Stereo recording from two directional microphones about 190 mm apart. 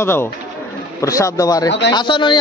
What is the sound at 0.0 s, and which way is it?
A man's voice, 10° left (ahead or behind).